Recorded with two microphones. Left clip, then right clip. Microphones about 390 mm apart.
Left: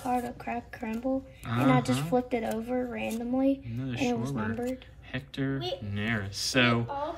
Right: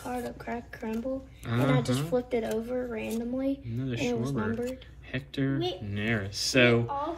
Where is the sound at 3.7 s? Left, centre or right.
Centre.